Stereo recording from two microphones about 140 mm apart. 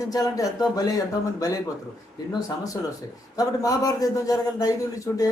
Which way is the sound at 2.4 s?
25° left (ahead or behind).